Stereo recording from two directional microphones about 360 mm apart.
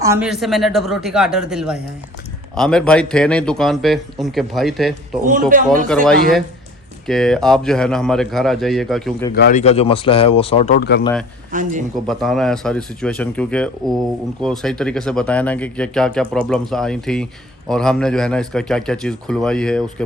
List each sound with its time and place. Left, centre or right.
0.0 s speech: centre
5.3 s speech: right
7.1 s speech: centre
9.3 s speech: left
11.0 s speech: centre
11.5 s speech: right
12.0 s speech: centre